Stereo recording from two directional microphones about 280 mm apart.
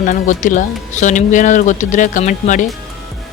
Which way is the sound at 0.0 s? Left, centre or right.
Left.